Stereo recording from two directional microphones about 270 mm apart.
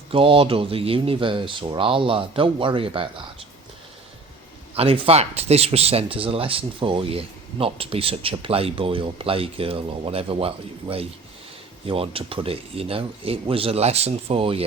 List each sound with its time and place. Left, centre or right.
0.1 s speech: centre
4.7 s speech: right